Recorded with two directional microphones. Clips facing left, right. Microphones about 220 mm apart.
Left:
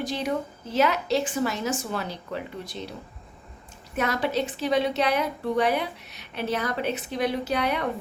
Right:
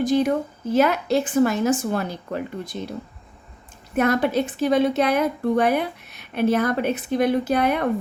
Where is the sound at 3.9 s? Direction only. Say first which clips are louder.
Right 6 dB; 55° right (ahead or behind).